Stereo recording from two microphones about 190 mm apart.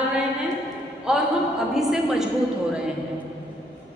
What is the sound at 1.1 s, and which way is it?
A woman's voice, 5° right (ahead or behind).